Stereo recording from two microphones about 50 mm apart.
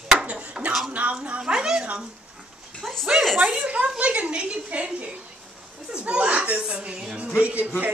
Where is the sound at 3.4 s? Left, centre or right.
Right.